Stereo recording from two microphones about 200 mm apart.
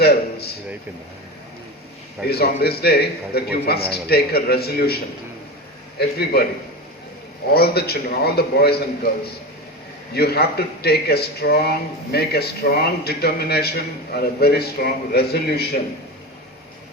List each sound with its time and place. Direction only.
0.0 s a man's voice: 50° left (ahead or behind)
2.3 s speech: 50° left (ahead or behind)
6.0 s speech: 50° left (ahead or behind)
7.5 s speech: 50° left (ahead or behind)
10.2 s speech: 50° left (ahead or behind)